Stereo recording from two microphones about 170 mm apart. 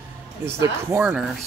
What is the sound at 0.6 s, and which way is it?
Speech, 10° right (ahead or behind).